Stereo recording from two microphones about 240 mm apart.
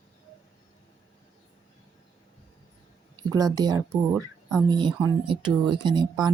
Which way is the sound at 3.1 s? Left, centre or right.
Centre.